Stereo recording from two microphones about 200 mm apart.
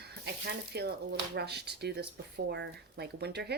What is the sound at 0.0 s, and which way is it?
Speech, 55° right (ahead or behind).